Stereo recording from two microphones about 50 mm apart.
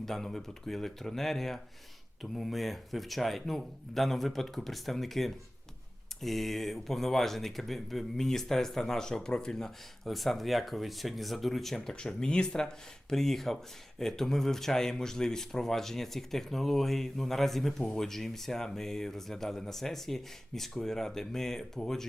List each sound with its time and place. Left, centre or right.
0.0 s speech: centre